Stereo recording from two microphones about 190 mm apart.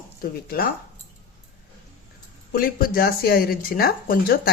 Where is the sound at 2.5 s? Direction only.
50° left (ahead or behind).